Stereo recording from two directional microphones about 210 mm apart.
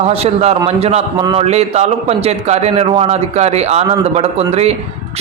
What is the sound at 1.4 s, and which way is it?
A man's voice, 30° right (ahead or behind).